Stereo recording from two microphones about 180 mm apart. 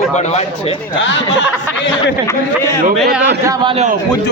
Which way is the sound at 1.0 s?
90° left.